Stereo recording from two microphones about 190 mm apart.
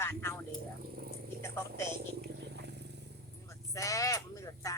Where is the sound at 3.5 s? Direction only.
15° left (ahead or behind).